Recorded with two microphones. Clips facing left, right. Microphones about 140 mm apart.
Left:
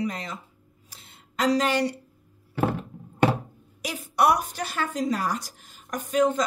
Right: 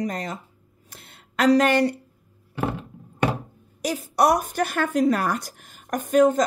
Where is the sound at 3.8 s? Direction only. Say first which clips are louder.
Right 3 dB; 40° right (ahead or behind).